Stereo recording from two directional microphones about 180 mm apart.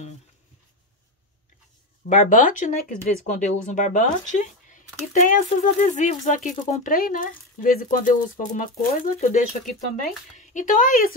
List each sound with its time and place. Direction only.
2.0 s speech: 45° left (ahead or behind)